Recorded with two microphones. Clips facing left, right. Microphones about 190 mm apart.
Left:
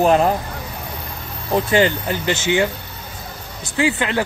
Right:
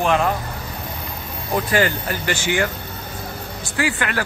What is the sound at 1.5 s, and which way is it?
Speech, 25° left (ahead or behind).